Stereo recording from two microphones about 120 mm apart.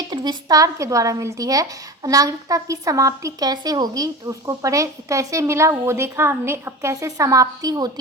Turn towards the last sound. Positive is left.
turn(degrees=-30)  # may be behind; listen again after turning